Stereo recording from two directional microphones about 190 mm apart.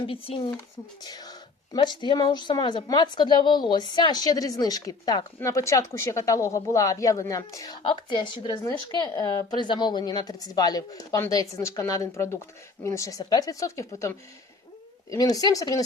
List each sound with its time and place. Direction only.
0.1 s a woman's voice: 30° left (ahead or behind)
15.1 s a woman's voice: 20° left (ahead or behind)